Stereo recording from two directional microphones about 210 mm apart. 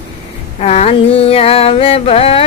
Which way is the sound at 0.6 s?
30° left (ahead or behind).